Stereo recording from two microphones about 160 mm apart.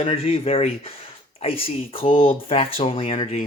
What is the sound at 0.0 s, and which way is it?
Speech, 35° left (ahead or behind).